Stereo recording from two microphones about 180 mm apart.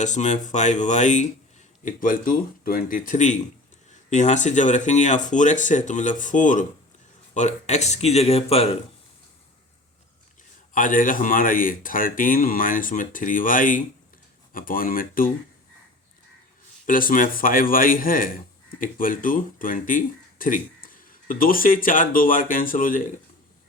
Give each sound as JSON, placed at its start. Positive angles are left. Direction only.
{"t": 0.0, "sound": "speech", "side_deg": 40}
{"t": 10.8, "sound": "speech", "side_deg": 50}
{"t": 16.8, "sound": "speech", "side_deg": 50}